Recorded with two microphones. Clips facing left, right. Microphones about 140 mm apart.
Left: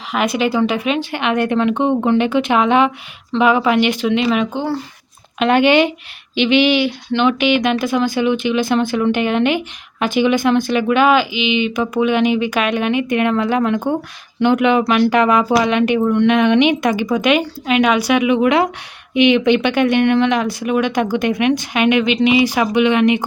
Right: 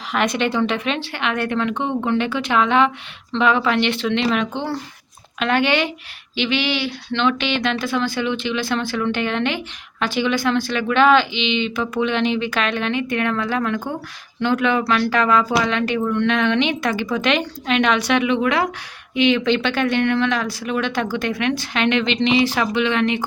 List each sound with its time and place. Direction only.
0.1 s speech: 5° left (ahead or behind)
5.4 s speech: 15° left (ahead or behind)